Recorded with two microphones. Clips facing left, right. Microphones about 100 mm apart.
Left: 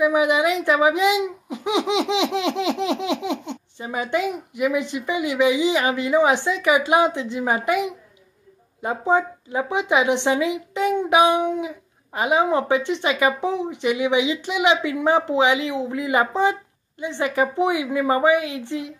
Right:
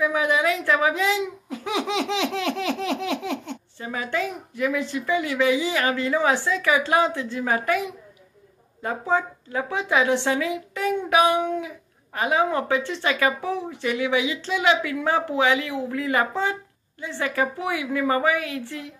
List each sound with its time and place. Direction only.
0.0 s a child's voice: 15° left (ahead or behind)